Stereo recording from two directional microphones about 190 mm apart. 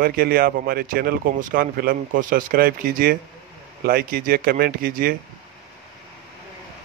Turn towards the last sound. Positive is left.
turn(degrees=-50)  # may be behind; listen again after turning